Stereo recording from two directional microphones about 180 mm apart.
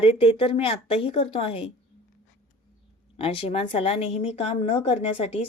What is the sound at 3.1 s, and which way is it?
A woman's voice, 30° left (ahead or behind).